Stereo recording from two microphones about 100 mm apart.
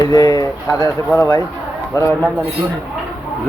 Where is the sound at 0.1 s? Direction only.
35° left (ahead or behind).